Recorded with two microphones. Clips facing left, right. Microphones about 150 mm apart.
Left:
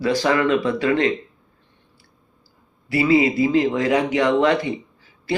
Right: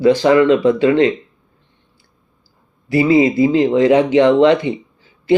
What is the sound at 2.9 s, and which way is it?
Speech, 25° right (ahead or behind).